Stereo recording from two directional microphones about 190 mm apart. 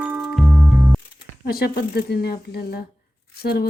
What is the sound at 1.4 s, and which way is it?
A woman's voice, 55° left (ahead or behind).